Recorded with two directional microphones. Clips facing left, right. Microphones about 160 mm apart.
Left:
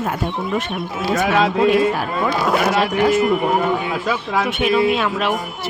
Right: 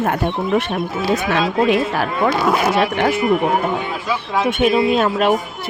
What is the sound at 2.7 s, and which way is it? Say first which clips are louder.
Speech: left 1 dB; 60° right (ahead or behind).